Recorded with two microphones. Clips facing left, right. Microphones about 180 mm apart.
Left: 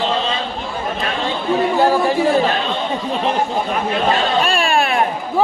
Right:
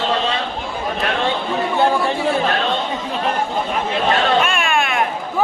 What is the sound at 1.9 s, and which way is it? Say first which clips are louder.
Speech: left 3 dB; 10° left (ahead or behind).